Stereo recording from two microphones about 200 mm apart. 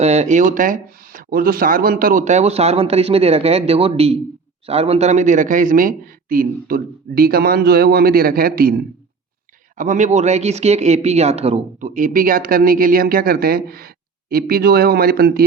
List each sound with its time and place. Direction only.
0.0 s a man's voice: 35° right (ahead or behind)
9.7 s a man's voice: 40° right (ahead or behind)